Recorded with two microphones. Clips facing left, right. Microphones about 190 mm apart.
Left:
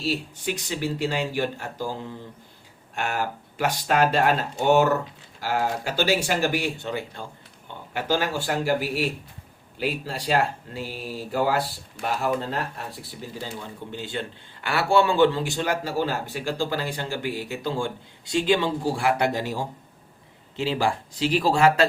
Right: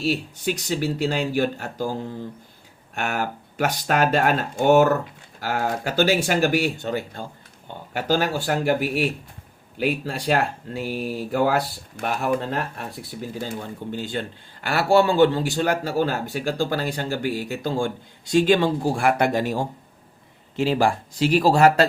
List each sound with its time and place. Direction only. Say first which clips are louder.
0.5 s a man's voice: right 3 dB; 45° right (ahead or behind)
13.4 s a man's voice: right 4 dB; 45° right (ahead or behind)